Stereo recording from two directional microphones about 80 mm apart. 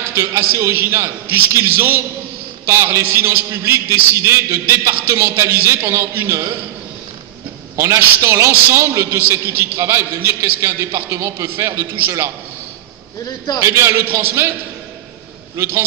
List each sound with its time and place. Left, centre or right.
0.1 s a man's voice: right
7.7 s a man's voice: right
13.6 s a man's voice: right
15.5 s a man's voice: right